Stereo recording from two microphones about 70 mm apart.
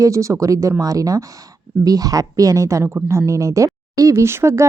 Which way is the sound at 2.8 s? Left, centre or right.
Right.